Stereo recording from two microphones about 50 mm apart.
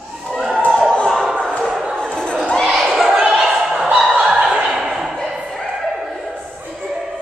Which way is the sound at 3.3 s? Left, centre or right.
Centre.